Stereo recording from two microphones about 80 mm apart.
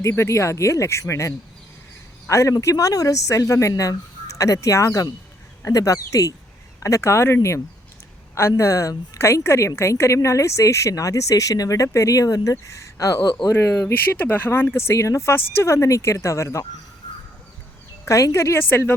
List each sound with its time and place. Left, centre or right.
0.0 s a woman's voice: left
14.2 s a woman's voice: left
18.0 s a woman's voice: left